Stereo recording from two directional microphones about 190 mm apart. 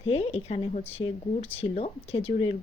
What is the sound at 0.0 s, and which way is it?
Speech, 30° left (ahead or behind).